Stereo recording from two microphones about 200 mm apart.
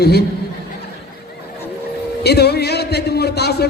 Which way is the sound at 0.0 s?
55° left (ahead or behind).